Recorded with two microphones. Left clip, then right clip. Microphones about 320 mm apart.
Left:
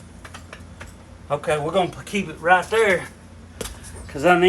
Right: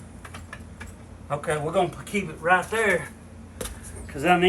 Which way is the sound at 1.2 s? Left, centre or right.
Left.